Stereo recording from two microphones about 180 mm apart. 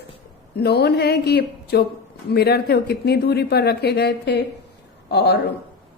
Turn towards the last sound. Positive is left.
turn(degrees=65)  # may be behind; listen again after turning